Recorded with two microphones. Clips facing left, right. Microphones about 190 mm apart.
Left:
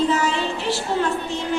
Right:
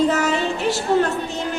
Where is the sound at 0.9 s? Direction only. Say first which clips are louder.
Right 6 dB; 50° right (ahead or behind).